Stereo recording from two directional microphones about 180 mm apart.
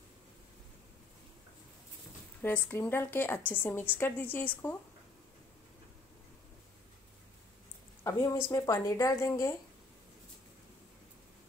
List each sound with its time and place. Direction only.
2.4 s a woman's voice: 10° left (ahead or behind)
8.0 s a woman's voice: 15° left (ahead or behind)